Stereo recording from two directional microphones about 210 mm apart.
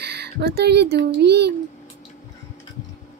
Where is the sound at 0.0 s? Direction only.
50° right (ahead or behind).